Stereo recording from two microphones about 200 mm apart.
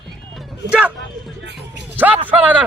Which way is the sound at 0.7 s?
5° right (ahead or behind).